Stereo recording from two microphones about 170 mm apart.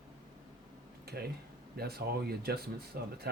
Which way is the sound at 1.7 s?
65° right (ahead or behind).